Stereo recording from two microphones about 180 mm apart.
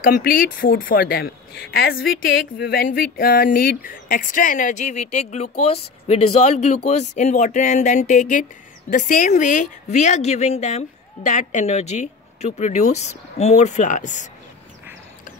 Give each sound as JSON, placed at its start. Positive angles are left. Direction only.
{"t": 0.0, "sound": "a woman's voice", "side_deg": 55}